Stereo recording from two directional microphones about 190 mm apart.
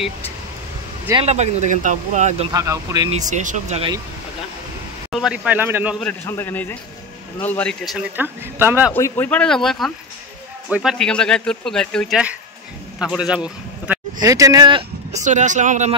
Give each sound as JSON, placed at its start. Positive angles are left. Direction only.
{"t": 1.2, "sound": "speech", "side_deg": -35}
{"t": 2.5, "sound": "a man's voice", "side_deg": -15}
{"t": 3.1, "sound": "speech", "side_deg": -40}
{"t": 5.1, "sound": "a man's voice", "side_deg": -5}
{"t": 5.9, "sound": "a man's voice", "side_deg": 10}
{"t": 8.2, "sound": "a man's voice", "side_deg": -10}
{"t": 8.9, "sound": "a man's voice", "side_deg": 10}
{"t": 14.2, "sound": "speech", "side_deg": -15}
{"t": 15.2, "sound": "speech", "side_deg": -40}